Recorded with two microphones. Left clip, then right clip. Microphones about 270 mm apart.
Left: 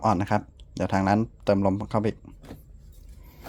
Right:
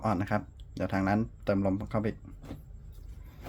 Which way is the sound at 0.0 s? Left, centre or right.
Left.